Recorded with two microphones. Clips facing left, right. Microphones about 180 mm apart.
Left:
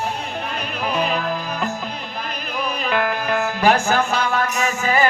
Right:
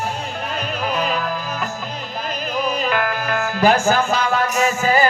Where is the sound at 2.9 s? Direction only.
20° left (ahead or behind).